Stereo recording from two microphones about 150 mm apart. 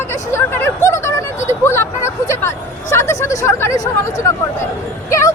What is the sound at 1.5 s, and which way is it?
A woman's voice, 15° left (ahead or behind).